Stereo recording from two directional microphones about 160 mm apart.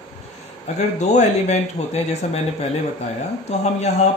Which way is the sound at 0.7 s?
45° left (ahead or behind).